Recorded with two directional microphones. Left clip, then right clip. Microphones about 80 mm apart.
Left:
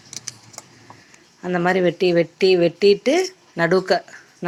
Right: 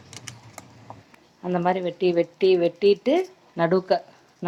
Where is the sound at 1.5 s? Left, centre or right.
Left.